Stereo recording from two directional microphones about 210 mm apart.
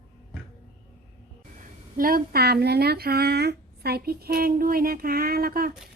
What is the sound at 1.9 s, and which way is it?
Speech, 45° right (ahead or behind).